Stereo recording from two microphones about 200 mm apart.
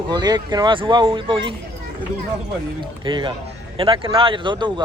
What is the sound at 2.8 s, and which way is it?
Speech, 25° right (ahead or behind).